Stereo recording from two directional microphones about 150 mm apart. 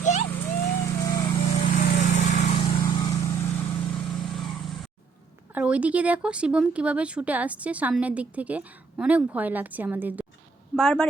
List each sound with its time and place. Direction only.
0.0 s vehicle: 50° left (ahead or behind)
0.4 s vehicle: 20° left (ahead or behind)
1.4 s lawn mower: 40° left (ahead or behind)
1.6 s lawn mower: 60° left (ahead or behind)
2.6 s vehicle: 35° left (ahead or behind)
3.9 s vehicle: 5° left (ahead or behind)
5.5 s speech: 10° right (ahead or behind)
10.8 s speech: 5° left (ahead or behind)